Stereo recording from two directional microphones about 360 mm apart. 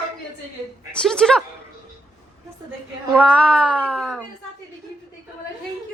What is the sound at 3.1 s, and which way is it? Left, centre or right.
Speech, centre.